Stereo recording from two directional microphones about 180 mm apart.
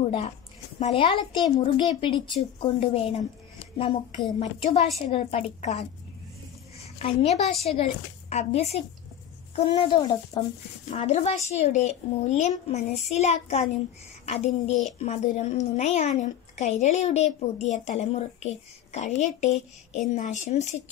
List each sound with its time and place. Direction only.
0.7 s a woman's voice: 35° left (ahead or behind)
7.0 s a woman's voice: 35° left (ahead or behind)
10.9 s a woman's voice: 40° left (ahead or behind)